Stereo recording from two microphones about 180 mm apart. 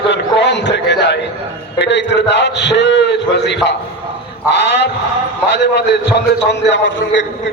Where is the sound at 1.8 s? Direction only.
75° left (ahead or behind).